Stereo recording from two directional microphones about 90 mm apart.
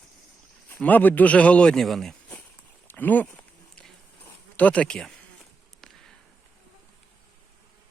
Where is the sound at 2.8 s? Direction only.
20° left (ahead or behind).